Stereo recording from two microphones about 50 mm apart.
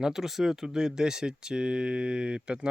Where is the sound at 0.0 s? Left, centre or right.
Centre.